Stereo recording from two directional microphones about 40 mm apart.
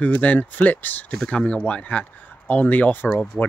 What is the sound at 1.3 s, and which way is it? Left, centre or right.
Speech, left.